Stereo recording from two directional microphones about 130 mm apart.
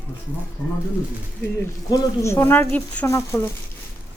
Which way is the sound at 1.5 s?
20° left (ahead or behind).